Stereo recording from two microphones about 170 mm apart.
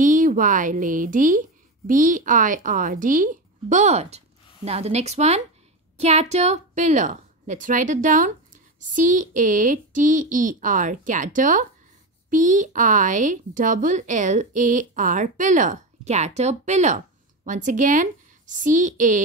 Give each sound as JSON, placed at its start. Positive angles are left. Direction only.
{"t": 0.0, "sound": "a woman's voice", "side_deg": -50}